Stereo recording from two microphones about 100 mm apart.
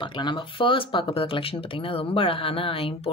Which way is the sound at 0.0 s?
55° left (ahead or behind).